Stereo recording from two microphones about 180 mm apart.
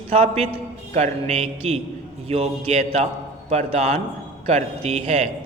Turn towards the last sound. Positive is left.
turn(degrees=-40)  # may be behind; listen again after turning